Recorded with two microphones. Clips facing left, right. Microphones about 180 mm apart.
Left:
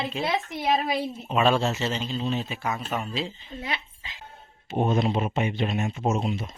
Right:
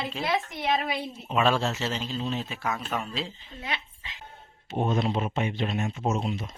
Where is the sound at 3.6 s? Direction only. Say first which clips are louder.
Left 1 dB; 35° left (ahead or behind).